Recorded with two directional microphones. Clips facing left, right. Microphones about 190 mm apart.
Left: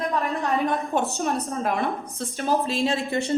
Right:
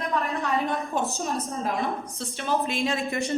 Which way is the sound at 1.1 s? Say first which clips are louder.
Left 3 dB; 60° left (ahead or behind).